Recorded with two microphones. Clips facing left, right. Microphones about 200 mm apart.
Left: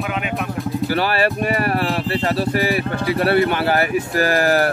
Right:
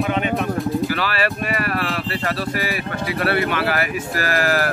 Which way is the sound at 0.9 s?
30° left (ahead or behind).